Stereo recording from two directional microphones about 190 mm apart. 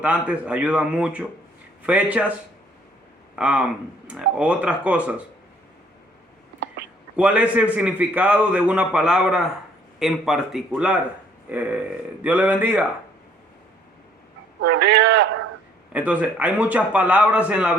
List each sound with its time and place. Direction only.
0.0 s a man's voice: 5° right (ahead or behind)
3.3 s a man's voice: 5° right (ahead or behind)
7.2 s a man's voice: 5° right (ahead or behind)
14.6 s speech: 65° right (ahead or behind)
15.9 s a man's voice: 5° right (ahead or behind)